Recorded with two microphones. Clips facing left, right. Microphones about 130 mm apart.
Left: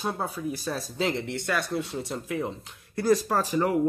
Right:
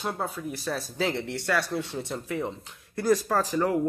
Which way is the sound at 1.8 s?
5° left (ahead or behind).